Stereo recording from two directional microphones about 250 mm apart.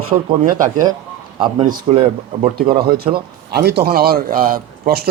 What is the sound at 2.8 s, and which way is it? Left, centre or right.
A man's voice, right.